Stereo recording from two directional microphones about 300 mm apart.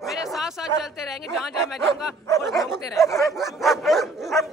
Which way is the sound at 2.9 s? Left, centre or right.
Centre.